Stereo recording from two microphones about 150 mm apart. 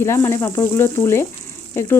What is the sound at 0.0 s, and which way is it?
Frying, 20° left (ahead or behind).